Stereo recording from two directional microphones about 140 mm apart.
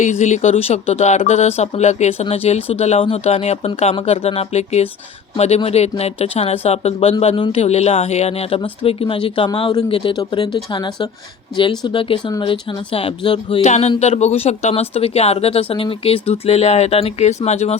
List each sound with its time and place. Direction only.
0.0 s speech: 60° left (ahead or behind); by 13.6 s 40° left (ahead or behind)
13.6 s speech: 55° left (ahead or behind)